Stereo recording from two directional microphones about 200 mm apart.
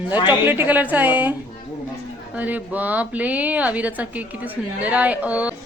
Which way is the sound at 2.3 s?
5° right (ahead or behind).